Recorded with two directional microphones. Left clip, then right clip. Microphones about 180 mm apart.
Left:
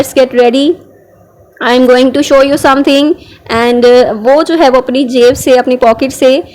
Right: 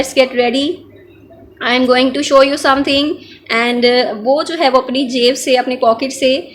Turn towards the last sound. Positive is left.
turn(degrees=55)  # may be behind; listen again after turning